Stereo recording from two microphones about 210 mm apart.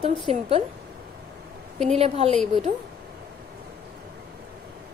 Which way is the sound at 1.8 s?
30° right (ahead or behind).